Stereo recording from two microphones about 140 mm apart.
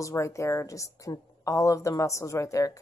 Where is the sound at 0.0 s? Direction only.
20° left (ahead or behind).